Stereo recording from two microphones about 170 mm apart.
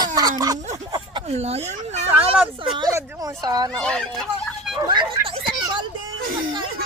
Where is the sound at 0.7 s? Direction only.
25° right (ahead or behind).